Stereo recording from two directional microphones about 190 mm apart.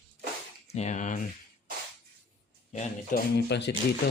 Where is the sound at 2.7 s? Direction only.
40° left (ahead or behind).